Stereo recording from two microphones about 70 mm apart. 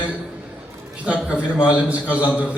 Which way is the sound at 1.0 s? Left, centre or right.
Centre.